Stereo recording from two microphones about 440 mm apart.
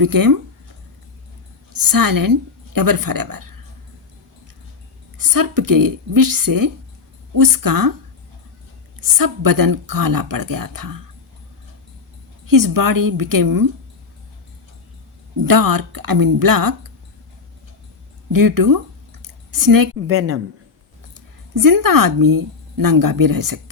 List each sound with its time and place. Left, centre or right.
0.0 s speech: right
1.7 s speech: right
5.1 s speech: right
9.0 s speech: right
12.5 s speech: right
15.4 s speech: right
18.3 s speech: right
19.2 s a sound: right
20.1 s a woman's voice: right
21.5 s speech: right